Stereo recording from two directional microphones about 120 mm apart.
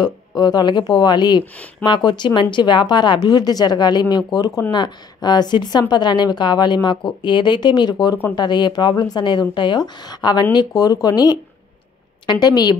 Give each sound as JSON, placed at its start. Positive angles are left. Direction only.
{"t": 0.4, "sound": "speech", "side_deg": 35}